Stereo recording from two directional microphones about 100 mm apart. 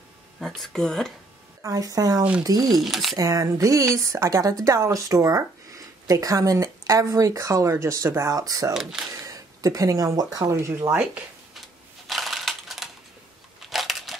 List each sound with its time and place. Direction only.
0.4 s speech: 5° left (ahead or behind)
1.6 s speech: 35° right (ahead or behind)
2.8 s speech: centre (ahead or behind)
3.2 s speech: 40° right (ahead or behind)
12.1 s crushing: centre (ahead or behind)
13.7 s a sound: centre (ahead or behind)